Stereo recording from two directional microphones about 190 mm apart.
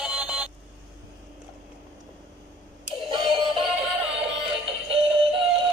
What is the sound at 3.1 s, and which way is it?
Synthetic singing, 25° right (ahead or behind).